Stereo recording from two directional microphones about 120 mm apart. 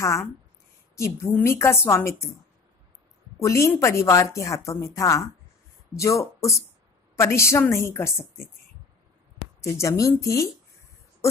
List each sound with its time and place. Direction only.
0.0 s a woman's voice: 25° left (ahead or behind)
3.4 s a woman's voice: 25° left (ahead or behind)
9.6 s a woman's voice: 25° left (ahead or behind)